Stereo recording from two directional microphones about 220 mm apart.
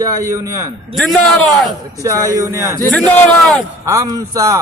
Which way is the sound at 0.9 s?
Centre (ahead or behind).